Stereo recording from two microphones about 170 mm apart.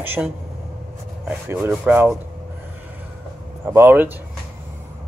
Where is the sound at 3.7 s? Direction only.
10° right (ahead or behind).